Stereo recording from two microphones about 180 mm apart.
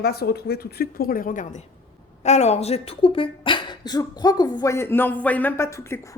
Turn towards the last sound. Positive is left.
turn(degrees=15)  # may be behind; listen again after turning